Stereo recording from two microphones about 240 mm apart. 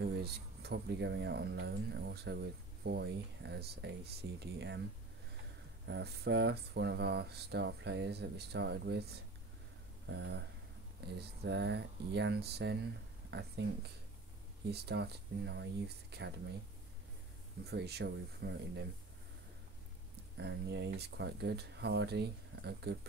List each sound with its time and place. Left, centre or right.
0.0 s speech: right
5.9 s speech: right
14.7 s speech: right
17.6 s speech: right
20.3 s speech: right